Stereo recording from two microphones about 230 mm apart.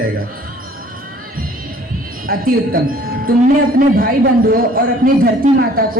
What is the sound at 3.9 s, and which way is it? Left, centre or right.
Speech, right.